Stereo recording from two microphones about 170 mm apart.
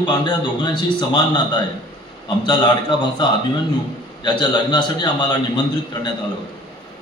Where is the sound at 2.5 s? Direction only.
25° left (ahead or behind).